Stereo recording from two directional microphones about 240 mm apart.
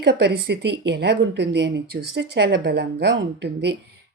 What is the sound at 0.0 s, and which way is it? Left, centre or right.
A woman's voice, right.